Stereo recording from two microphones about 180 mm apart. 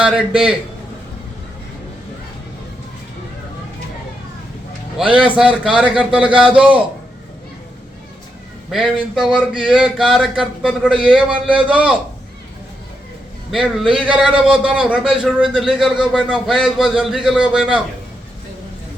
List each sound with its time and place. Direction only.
0.0 s a man's voice: 5° right (ahead or behind)
5.6 s a man's voice: 5° right (ahead or behind)
8.7 s a man's voice: 5° right (ahead or behind)
11.3 s a man's voice: 30° right (ahead or behind)
11.7 s a man's voice: 5° right (ahead or behind)
13.5 s a man's voice: centre (ahead or behind)